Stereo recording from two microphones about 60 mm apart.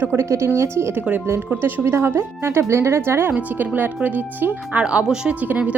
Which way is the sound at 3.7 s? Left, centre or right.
Right.